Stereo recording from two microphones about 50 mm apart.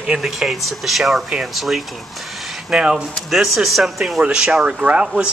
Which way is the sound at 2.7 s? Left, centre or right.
Centre.